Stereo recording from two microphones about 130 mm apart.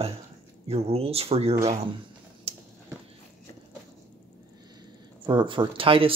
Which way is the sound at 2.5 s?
50° right (ahead or behind).